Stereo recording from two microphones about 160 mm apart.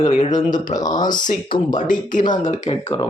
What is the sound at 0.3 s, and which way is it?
Speech, 25° left (ahead or behind).